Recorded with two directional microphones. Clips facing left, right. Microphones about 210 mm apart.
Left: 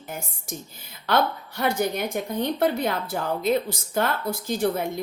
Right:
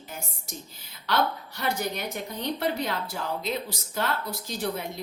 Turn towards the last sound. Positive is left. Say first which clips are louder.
# left 7 dB
turn(degrees=50)  # may be behind; listen again after turning